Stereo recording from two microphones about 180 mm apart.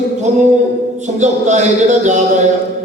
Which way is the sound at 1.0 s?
40° right (ahead or behind).